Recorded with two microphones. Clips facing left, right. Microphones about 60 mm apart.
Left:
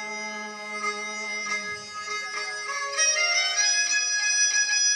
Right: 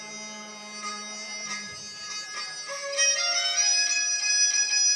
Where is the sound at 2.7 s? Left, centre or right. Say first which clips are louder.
Even; left.